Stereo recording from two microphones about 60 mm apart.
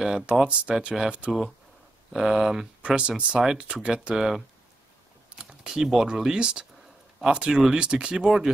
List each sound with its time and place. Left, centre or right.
0.0 s speech: centre